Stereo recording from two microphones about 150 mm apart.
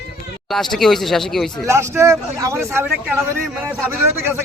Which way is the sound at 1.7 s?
20° right (ahead or behind).